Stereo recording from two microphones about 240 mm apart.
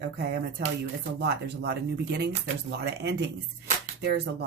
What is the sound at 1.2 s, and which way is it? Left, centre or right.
Speech, right.